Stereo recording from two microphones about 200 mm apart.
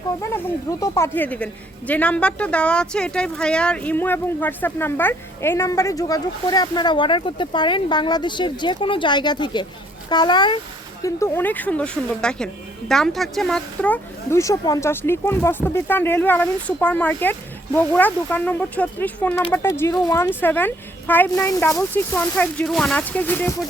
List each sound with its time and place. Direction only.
0.2 s speech: 15° left (ahead or behind)